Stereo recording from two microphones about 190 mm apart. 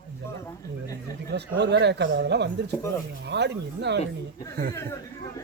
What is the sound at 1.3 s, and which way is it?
Speech, 65° right (ahead or behind).